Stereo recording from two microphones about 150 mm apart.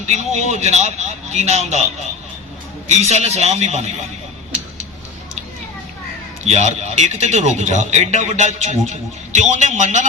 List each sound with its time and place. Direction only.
0.0 s a man's voice: 50° right (ahead or behind)
2.9 s a man's voice: 45° right (ahead or behind)
6.4 s a man's voice: 50° right (ahead or behind)